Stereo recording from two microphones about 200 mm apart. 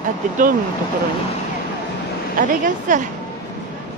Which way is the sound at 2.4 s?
40° right (ahead or behind).